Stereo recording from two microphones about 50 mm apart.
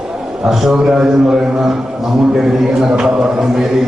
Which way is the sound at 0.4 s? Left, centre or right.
Centre.